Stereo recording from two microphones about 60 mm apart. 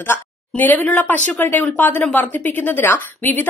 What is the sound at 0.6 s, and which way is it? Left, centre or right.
A woman's voice, left.